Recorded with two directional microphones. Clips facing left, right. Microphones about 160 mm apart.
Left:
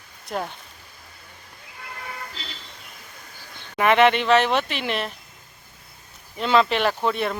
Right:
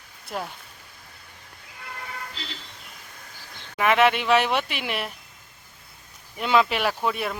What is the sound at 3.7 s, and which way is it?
Speech, centre (ahead or behind).